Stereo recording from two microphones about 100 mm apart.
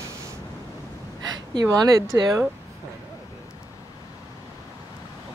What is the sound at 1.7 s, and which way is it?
Speech, 35° right (ahead or behind).